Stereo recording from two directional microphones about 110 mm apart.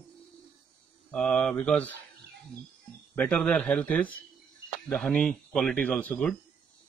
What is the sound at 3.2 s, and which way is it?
Speech, 10° left (ahead or behind).